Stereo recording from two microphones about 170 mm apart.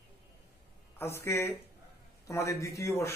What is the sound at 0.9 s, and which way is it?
A man's voice, 15° left (ahead or behind).